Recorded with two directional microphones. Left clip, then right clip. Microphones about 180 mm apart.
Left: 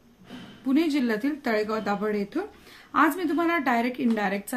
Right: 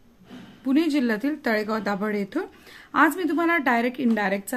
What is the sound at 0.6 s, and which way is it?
A woman's voice, 35° right (ahead or behind).